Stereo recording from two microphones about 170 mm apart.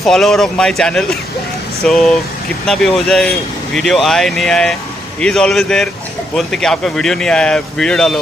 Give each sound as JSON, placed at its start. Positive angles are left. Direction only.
{"t": 0.0, "sound": "speech", "side_deg": 0}